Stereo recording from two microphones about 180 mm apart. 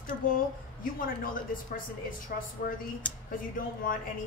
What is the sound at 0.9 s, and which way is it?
A woman's voice, 50° left (ahead or behind).